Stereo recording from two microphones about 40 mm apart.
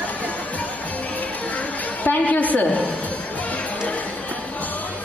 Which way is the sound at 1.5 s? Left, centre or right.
Left.